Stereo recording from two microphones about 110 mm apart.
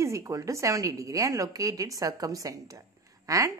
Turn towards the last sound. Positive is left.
turn(degrees=-30)  # may be behind; listen again after turning